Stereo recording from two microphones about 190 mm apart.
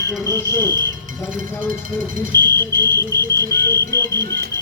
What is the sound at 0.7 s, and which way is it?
Speech, 20° right (ahead or behind).